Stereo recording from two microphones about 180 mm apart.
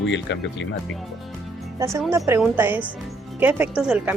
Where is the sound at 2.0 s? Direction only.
15° right (ahead or behind).